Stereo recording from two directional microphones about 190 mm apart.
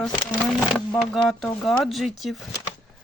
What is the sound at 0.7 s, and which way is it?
Speech, centre (ahead or behind).